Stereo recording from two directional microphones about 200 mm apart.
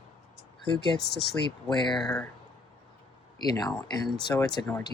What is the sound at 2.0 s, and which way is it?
Speech, 5° left (ahead or behind).